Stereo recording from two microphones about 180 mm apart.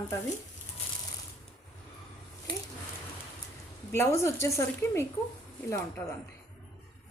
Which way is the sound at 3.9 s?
15° left (ahead or behind).